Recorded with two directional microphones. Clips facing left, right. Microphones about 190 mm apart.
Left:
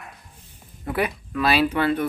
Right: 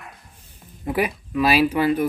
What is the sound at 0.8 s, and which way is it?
Speech, 10° right (ahead or behind).